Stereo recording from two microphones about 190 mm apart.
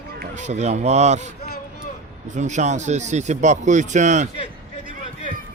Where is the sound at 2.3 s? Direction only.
40° right (ahead or behind).